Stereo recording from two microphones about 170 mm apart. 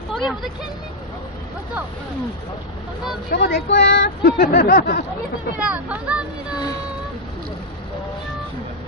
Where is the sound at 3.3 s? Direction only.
70° left (ahead or behind).